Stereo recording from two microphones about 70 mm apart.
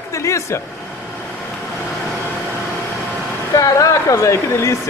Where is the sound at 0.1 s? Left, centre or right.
Left.